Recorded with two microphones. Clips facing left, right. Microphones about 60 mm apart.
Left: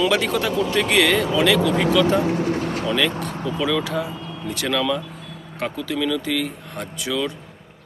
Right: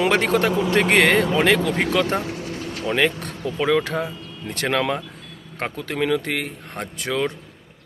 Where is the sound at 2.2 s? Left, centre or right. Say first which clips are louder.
Left 8 dB; left.